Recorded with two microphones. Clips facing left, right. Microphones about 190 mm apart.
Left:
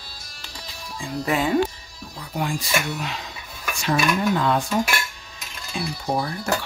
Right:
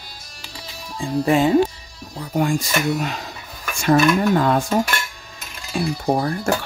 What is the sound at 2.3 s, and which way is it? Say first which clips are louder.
Speech: right 5 dB; 45° right (ahead or behind).